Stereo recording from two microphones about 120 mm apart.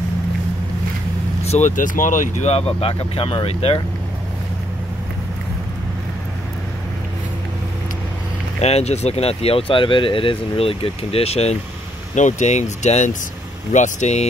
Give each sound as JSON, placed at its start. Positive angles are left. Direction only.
{"t": 1.4, "sound": "speech", "side_deg": 75}
{"t": 2.8, "sound": "speech", "side_deg": 50}
{"t": 8.5, "sound": "speech", "side_deg": 60}
{"t": 12.2, "sound": "speech", "side_deg": 90}
{"t": 13.7, "sound": "speech", "side_deg": 90}